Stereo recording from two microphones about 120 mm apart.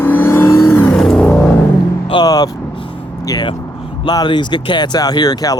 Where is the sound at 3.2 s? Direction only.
35° left (ahead or behind).